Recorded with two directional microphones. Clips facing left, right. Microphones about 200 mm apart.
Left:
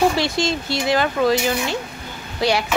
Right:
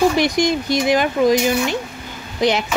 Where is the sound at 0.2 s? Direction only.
15° right (ahead or behind).